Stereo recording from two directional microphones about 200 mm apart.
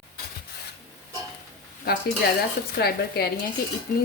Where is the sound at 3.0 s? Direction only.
50° left (ahead or behind).